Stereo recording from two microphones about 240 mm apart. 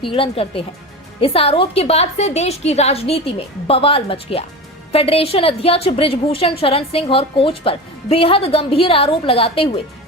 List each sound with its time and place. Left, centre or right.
0.0 s a woman's voice: left